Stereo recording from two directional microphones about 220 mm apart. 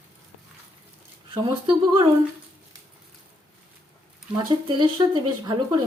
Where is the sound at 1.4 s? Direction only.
25° right (ahead or behind).